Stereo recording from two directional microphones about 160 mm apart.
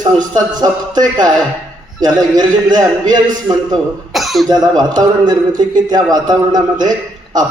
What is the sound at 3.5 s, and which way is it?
Speech, 5° right (ahead or behind).